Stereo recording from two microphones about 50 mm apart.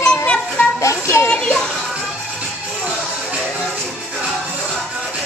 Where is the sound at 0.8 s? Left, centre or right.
Left.